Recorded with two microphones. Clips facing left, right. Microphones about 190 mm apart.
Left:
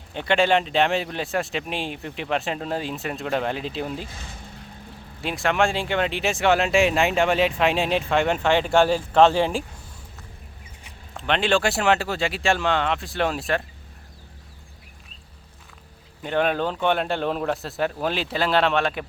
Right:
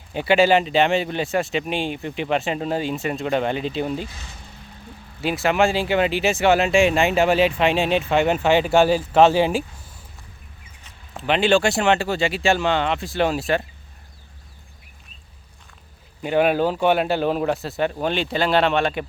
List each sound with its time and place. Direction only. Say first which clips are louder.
0.1 s speech: right 4 dB; 5° right (ahead or behind)
4.1 s speech: left 2 dB; 50° left (ahead or behind)
5.2 s speech: right 3 dB; 5° right (ahead or behind)
11.1 s speech: right 4 dB; 5° right (ahead or behind)
16.2 s speech: right 4 dB; 10° right (ahead or behind)